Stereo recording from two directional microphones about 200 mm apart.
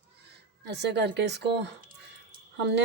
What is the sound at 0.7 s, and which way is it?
Speech, 60° right (ahead or behind).